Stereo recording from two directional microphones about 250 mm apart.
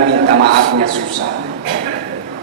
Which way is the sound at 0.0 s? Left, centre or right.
Right.